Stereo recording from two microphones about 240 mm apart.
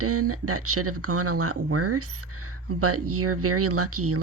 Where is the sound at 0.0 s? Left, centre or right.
Right.